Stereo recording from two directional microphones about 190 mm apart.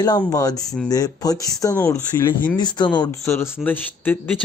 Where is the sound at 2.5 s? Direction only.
20° left (ahead or behind).